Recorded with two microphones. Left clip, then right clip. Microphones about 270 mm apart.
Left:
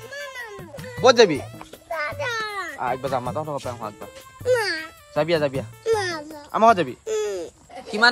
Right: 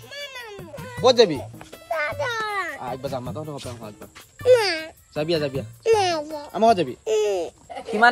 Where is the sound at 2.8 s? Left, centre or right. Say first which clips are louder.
Left 5 dB; centre.